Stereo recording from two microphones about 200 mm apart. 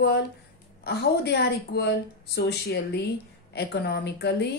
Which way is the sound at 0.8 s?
55° left (ahead or behind).